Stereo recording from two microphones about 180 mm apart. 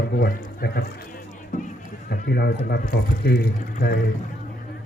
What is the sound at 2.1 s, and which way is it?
Speech, 65° left (ahead or behind).